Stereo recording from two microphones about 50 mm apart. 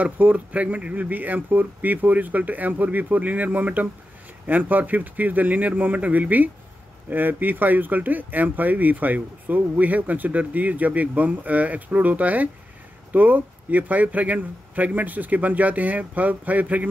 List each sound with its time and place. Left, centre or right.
0.0 s speech: right